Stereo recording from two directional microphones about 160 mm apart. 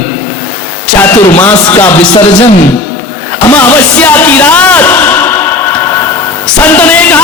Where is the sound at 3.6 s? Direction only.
10° left (ahead or behind).